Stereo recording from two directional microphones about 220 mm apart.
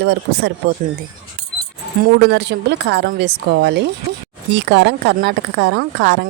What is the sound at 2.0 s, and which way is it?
A woman's voice, 50° right (ahead or behind).